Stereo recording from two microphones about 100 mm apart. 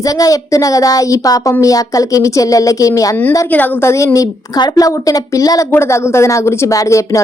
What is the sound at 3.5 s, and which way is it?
A woman's voice, 20° left (ahead or behind).